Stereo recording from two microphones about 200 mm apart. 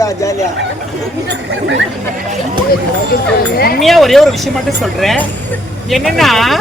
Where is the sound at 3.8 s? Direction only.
Centre (ahead or behind).